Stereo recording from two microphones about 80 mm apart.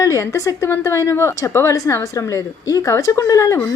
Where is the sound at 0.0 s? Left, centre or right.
Left.